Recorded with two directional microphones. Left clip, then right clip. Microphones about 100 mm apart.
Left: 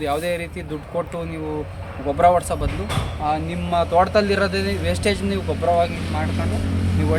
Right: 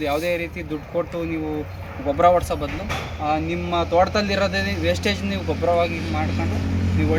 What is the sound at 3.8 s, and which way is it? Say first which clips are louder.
Speech: left 2 dB; 10° left (ahead or behind).